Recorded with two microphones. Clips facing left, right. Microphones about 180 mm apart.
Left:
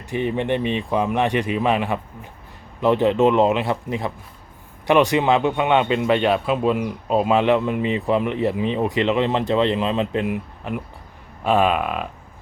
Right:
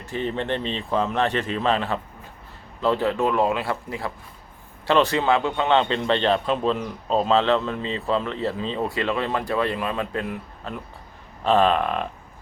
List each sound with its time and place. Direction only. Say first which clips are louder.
0.0 s a man's voice: left 4 dB; 15° left (ahead or behind)